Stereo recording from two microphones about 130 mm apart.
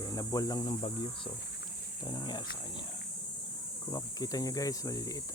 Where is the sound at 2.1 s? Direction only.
35° left (ahead or behind).